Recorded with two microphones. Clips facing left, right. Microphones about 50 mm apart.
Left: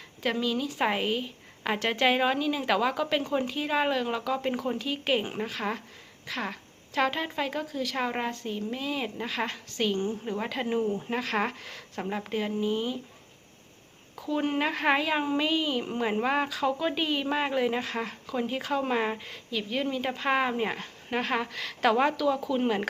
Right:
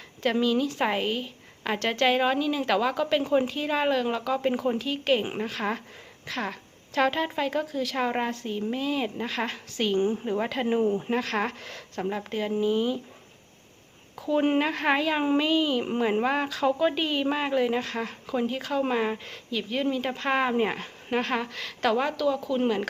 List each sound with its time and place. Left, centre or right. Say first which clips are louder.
0.4 s a woman's voice: right 1 dB; centre
4.8 s a woman's voice: right 3 dB; centre
10.7 s speech: right 4 dB; right
11.1 s a woman's voice: right 2 dB; centre
14.2 s speech: right 5 dB; centre
14.6 s a woman's voice: right 1 dB; centre
18.1 s speech: right 3 dB; centre
18.4 s a woman's voice: right 1 dB; centre
20.6 s speech: right 4 dB; centre
21.2 s a woman's voice: right 1 dB; centre